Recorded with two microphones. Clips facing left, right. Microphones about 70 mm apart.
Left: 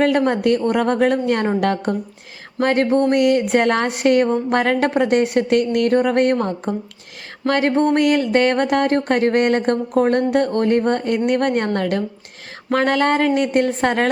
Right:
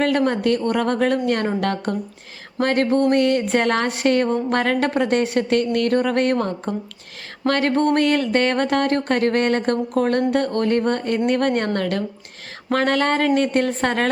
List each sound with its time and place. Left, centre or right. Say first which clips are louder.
0.0 s a woman's voice: left 2 dB; centre
2.6 s a sound: left 2 dB; left
2.8 s a woman's voice: left 1 dB; centre